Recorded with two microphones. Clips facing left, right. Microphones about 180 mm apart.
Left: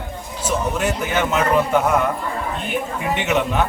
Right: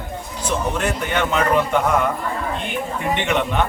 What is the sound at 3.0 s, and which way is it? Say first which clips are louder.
Speech: even; 5° left (ahead or behind).